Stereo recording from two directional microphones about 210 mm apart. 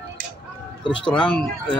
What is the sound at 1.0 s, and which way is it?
Speech, 5° left (ahead or behind).